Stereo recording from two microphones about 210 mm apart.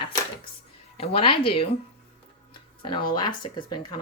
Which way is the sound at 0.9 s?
25° left (ahead or behind).